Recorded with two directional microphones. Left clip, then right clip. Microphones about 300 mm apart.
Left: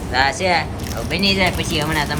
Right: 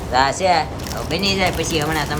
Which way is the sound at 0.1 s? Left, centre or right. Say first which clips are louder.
Right 1 dB; centre.